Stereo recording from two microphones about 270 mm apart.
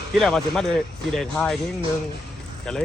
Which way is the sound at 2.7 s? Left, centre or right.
Centre.